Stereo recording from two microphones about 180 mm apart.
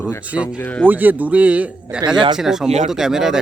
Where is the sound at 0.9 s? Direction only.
10° right (ahead or behind).